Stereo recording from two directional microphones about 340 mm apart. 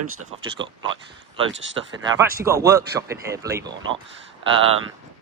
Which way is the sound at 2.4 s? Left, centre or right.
Centre.